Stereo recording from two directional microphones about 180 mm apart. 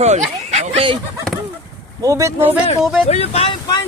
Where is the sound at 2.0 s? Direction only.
15° right (ahead or behind).